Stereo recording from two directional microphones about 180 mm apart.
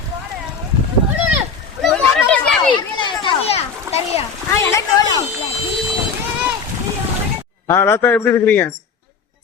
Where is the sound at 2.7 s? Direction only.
25° left (ahead or behind).